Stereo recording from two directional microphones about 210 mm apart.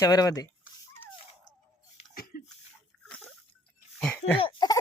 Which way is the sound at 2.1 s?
45° left (ahead or behind).